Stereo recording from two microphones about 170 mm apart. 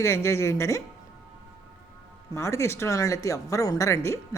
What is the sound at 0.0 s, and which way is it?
Speech, 15° left (ahead or behind).